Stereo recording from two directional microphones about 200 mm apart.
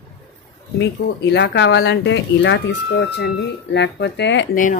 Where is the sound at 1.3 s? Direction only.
60° left (ahead or behind).